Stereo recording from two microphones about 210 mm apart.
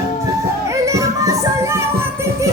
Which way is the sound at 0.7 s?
15° right (ahead or behind).